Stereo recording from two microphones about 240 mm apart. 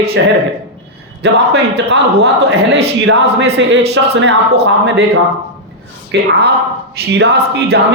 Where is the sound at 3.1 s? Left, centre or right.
Right.